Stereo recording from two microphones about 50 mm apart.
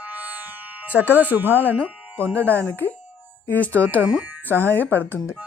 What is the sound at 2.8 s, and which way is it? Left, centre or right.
Speech, left.